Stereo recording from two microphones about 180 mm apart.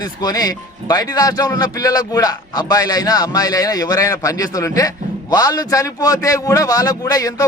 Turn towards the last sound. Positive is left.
turn(degrees=20)  # may be behind; listen again after turning